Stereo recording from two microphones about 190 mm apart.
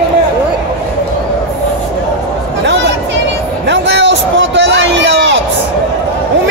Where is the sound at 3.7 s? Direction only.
70° right (ahead or behind).